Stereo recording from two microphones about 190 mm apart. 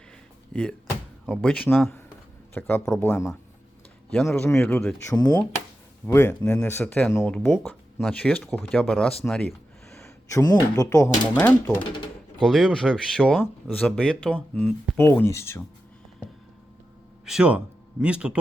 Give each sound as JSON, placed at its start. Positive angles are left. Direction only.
{"t": 0.5, "sound": "speech", "side_deg": 5}
{"t": 10.0, "sound": "speech", "side_deg": 15}
{"t": 17.2, "sound": "speech", "side_deg": -5}